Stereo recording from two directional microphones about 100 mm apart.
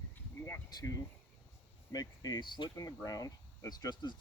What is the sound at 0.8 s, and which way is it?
Speech, 35° left (ahead or behind).